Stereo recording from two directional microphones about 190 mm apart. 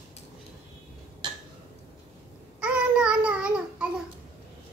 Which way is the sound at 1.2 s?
25° right (ahead or behind).